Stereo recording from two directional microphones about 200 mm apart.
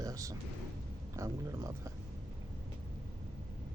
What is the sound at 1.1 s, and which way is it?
Speech, 15° right (ahead or behind).